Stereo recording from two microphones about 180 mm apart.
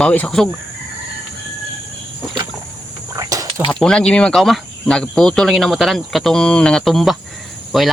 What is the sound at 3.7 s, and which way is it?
Speech, 5° left (ahead or behind).